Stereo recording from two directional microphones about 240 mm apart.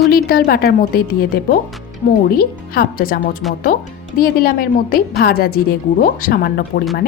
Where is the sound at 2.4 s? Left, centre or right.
Left.